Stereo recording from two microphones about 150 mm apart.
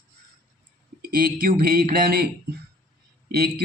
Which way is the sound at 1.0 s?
75° right (ahead or behind).